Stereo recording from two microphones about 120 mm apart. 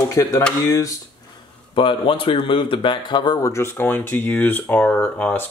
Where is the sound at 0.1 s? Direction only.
25° left (ahead or behind).